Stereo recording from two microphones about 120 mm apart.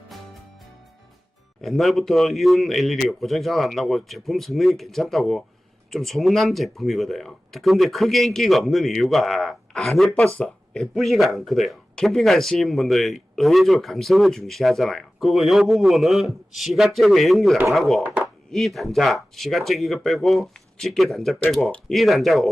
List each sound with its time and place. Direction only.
1.6 s speech: centre (ahead or behind)
18.0 s speech: 15° right (ahead or behind)
18.5 s speech: centre (ahead or behind)